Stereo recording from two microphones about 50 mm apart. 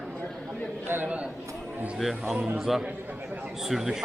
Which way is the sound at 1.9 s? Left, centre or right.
Centre.